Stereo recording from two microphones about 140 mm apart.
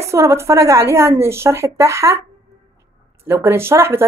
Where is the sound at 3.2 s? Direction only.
20° right (ahead or behind).